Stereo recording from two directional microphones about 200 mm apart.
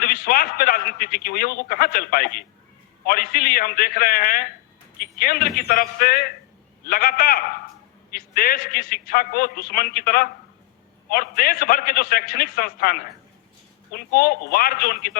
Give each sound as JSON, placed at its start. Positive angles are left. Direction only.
{"t": 0.0, "sound": "a man's voice", "side_deg": 45}